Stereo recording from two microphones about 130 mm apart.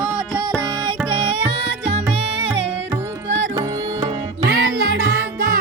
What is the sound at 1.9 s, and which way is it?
Music, 50° right (ahead or behind).